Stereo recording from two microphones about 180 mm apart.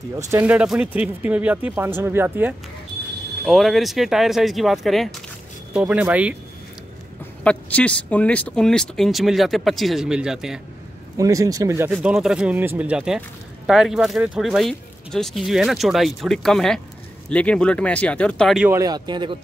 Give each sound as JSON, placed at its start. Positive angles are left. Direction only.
{"t": 0.2, "sound": "speech", "side_deg": -15}
{"t": 7.4, "sound": "speech", "side_deg": 5}
{"t": 11.1, "sound": "speech", "side_deg": -20}
{"t": 11.9, "sound": "speech", "side_deg": -5}
{"t": 18.7, "sound": "speech", "side_deg": -20}